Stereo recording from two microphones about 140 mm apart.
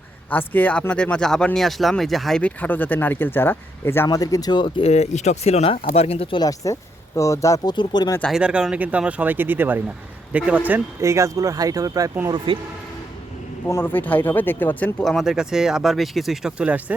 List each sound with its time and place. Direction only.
0.3 s speech: 10° left (ahead or behind); by 4.7 s 30° left (ahead or behind)
4.8 s speech: 50° left (ahead or behind)
6.4 s speech: 25° left (ahead or behind)
8.2 s speech: 5° right (ahead or behind)
11.0 s speech: 20° right (ahead or behind)
12.5 s speech: 40° right (ahead or behind)
13.7 s speech: 15° left (ahead or behind)
15.0 s speech: centre (ahead or behind)